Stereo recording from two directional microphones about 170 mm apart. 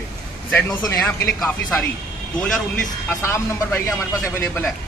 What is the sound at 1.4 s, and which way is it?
Speech, 10° left (ahead or behind).